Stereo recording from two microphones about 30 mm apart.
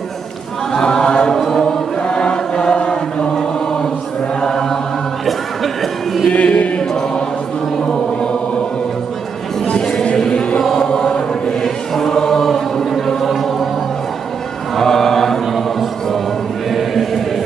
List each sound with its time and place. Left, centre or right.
0.7 s a sound: left
1.5 s choir: centre
2.0 s choir: left
4.4 s chant: centre
5.2 s a sound: centre
6.3 s chant: left
6.8 s choir: centre
10.1 s choir: left
11.0 s chant: centre
13.2 s chant: centre
14.8 s chant: centre
15.4 s a sound: centre
16.7 s choir: centre